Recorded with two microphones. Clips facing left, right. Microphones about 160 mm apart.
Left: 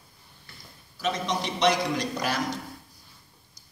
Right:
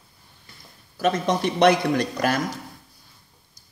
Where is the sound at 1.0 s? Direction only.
55° right (ahead or behind).